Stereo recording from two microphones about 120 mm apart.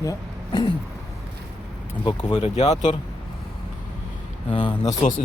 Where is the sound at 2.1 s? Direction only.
40° left (ahead or behind).